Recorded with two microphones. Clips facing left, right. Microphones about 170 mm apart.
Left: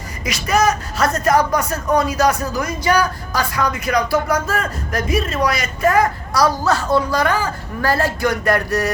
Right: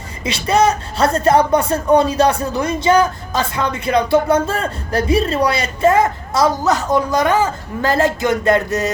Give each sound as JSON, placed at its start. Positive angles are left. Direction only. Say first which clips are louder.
{"t": 0.3, "sound": "a woman's voice", "louder": "right 2 dB", "side_deg": -30}